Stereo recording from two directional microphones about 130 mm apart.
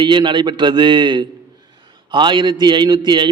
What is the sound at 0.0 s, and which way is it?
A man's voice, 40° right (ahead or behind).